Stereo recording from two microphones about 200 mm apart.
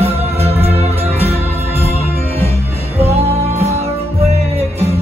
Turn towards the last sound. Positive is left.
turn(degrees=-30)  # may be behind; listen again after turning